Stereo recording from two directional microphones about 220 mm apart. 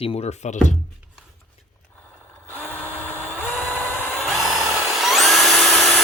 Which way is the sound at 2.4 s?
10° left (ahead or behind).